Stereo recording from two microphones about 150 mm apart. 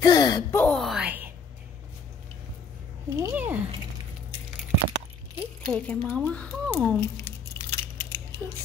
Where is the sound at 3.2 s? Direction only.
15° right (ahead or behind).